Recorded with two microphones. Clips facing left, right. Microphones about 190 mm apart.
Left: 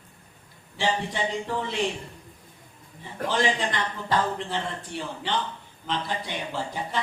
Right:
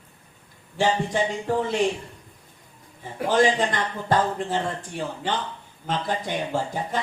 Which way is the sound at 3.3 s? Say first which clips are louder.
Right 5 dB; 45° right (ahead or behind).